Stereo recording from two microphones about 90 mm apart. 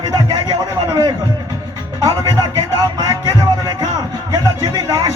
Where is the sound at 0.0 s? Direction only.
50° right (ahead or behind).